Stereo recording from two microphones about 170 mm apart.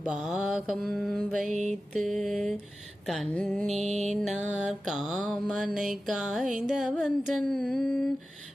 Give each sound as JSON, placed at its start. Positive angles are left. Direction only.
{"t": 0.0, "sound": "mantra", "side_deg": -5}
{"t": 1.5, "sound": "music", "side_deg": -45}
{"t": 2.0, "sound": "mantra", "side_deg": 0}